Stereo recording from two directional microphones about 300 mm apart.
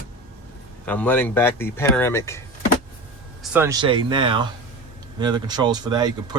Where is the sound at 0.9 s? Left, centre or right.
Centre.